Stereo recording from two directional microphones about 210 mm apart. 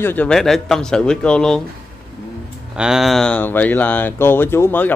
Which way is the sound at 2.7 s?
Centre (ahead or behind).